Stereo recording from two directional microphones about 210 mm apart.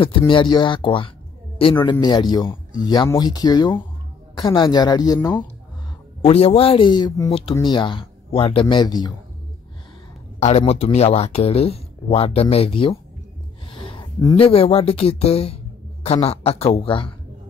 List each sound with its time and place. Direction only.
0.3 s speech: 20° left (ahead or behind)
6.2 s speech: 30° left (ahead or behind)
10.4 s speech: 30° left (ahead or behind)